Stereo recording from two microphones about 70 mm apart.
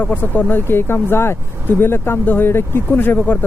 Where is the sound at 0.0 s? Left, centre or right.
Left.